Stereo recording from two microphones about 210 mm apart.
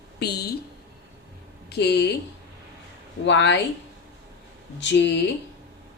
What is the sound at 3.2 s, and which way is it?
Speech, 60° left (ahead or behind).